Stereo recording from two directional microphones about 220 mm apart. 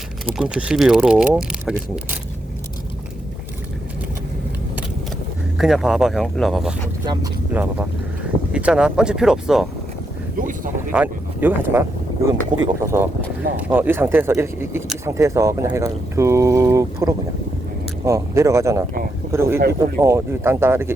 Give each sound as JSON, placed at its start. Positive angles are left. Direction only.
{"t": 0.3, "sound": "speech", "side_deg": -5}
{"t": 5.5, "sound": "speech", "side_deg": 0}
{"t": 10.3, "sound": "speech", "side_deg": -40}
{"t": 10.9, "sound": "speech", "side_deg": -10}
{"t": 19.5, "sound": "speech", "side_deg": -45}
{"t": 20.0, "sound": "speech", "side_deg": -10}